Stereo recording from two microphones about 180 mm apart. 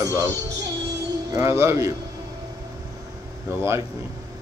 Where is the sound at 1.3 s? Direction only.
15° right (ahead or behind).